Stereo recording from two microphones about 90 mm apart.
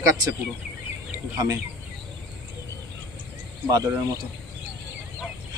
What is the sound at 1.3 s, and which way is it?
Speech, 40° right (ahead or behind).